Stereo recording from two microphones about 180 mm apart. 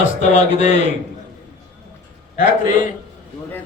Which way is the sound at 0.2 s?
40° left (ahead or behind).